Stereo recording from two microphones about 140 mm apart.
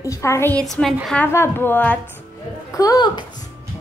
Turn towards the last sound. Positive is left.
turn(degrees=30)  # may be behind; listen again after turning